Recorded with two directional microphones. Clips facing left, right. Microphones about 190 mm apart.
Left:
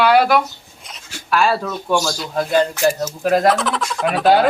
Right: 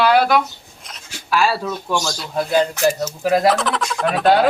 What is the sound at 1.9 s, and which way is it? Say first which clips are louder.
Speech: left 4 dB; centre (ahead or behind).